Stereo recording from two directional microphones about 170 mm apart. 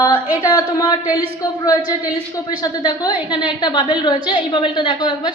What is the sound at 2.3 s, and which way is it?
A woman's voice, 20° left (ahead or behind).